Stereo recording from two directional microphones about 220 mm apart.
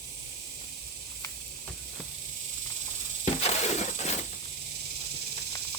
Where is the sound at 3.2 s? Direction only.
30° left (ahead or behind).